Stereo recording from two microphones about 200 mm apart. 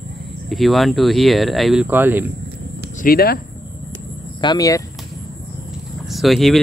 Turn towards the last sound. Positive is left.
turn(degrees=0)  # may be behind; listen again after turning